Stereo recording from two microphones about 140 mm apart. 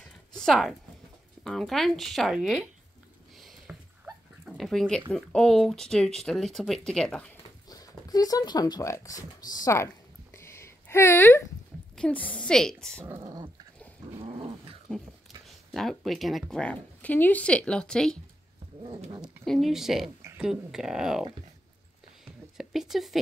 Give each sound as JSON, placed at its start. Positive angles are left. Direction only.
{"t": 0.0, "sound": "a sound", "side_deg": 5}
{"t": 1.4, "sound": "speech", "side_deg": 5}
{"t": 3.3, "sound": "a sound", "side_deg": 0}
{"t": 5.1, "sound": "speech", "side_deg": 5}
{"t": 7.6, "sound": "speech", "side_deg": 25}
{"t": 10.3, "sound": "a sound", "side_deg": 20}
{"t": 11.9, "sound": "speech", "side_deg": 10}
{"t": 14.2, "sound": "dog", "side_deg": -40}
{"t": 15.4, "sound": "speech", "side_deg": 0}
{"t": 18.8, "sound": "dog", "side_deg": -40}
{"t": 19.2, "sound": "speech", "side_deg": 0}
{"t": 22.6, "sound": "speech", "side_deg": 0}